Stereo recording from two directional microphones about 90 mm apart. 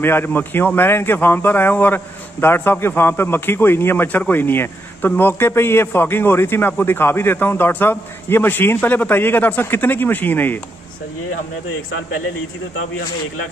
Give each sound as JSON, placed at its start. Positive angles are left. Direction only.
{"t": 0.0, "sound": "a man's voice", "side_deg": 25}